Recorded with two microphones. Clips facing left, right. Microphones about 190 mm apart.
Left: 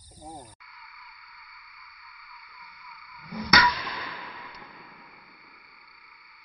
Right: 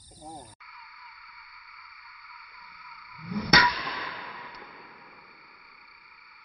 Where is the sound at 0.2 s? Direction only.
Centre (ahead or behind).